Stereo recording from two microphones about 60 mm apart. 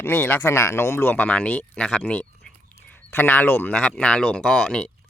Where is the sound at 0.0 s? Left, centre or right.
Left.